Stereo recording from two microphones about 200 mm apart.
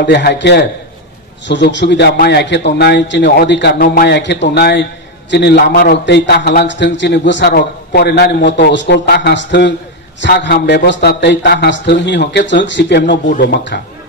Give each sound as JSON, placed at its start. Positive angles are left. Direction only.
{"t": 0.0, "sound": "a man's voice", "side_deg": 60}